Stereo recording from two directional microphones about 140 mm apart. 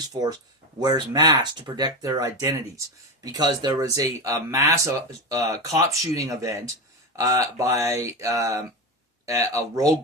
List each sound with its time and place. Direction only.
0.1 s speech: 30° right (ahead or behind)